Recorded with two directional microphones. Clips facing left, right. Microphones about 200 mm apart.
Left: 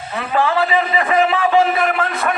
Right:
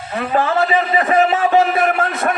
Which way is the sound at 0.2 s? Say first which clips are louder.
Right 1 dB; 45° right (ahead or behind).